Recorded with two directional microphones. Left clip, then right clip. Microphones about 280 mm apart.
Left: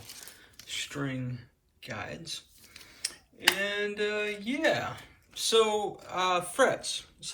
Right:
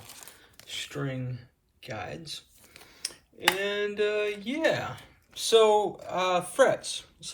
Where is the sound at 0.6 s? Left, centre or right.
Centre.